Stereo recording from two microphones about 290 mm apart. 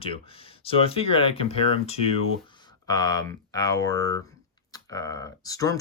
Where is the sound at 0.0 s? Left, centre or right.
Centre.